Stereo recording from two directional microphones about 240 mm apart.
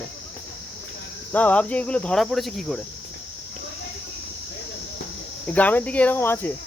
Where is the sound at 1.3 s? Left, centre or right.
Centre.